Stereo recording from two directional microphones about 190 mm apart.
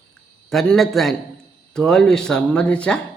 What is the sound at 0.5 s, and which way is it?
Speech, centre (ahead or behind).